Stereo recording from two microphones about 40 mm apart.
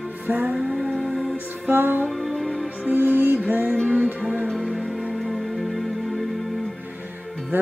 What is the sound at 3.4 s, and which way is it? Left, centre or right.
Music, right.